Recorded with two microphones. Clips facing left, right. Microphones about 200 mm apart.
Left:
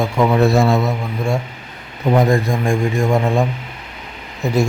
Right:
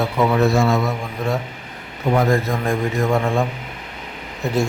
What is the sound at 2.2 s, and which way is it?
A man's voice, 15° left (ahead or behind).